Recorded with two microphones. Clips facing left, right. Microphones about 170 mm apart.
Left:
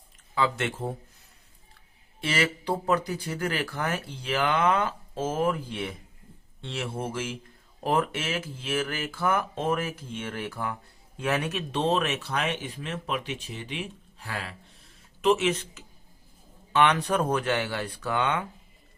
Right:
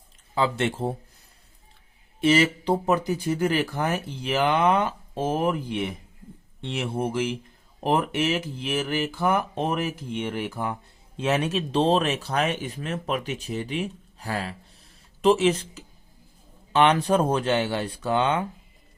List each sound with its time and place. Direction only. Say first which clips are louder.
0.3 s speech: right 3 dB; 30° right (ahead or behind)
2.2 s speech: right 7 dB; 20° right (ahead or behind)